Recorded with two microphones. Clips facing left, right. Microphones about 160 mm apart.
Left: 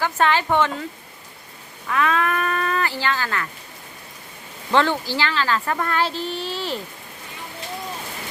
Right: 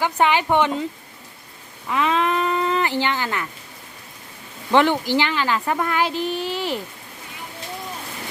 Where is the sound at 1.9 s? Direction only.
20° right (ahead or behind).